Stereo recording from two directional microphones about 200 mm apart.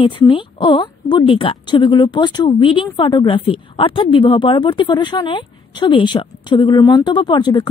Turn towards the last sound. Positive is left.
turn(degrees=20)  # may be behind; listen again after turning